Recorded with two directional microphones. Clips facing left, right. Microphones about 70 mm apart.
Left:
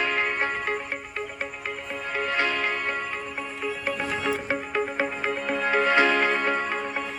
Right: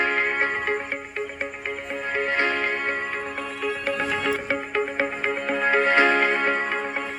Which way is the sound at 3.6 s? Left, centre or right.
Right.